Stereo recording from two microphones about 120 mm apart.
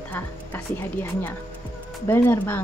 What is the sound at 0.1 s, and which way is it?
A woman's voice, 15° left (ahead or behind).